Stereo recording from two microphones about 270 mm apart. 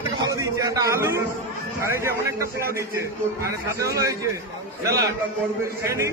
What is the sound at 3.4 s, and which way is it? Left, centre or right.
Speech, centre.